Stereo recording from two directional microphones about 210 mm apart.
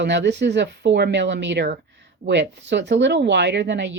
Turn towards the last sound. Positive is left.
turn(degrees=-55)  # may be behind; listen again after turning